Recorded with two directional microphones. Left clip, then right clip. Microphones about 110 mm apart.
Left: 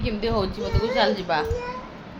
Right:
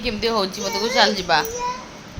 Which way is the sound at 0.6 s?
40° right (ahead or behind).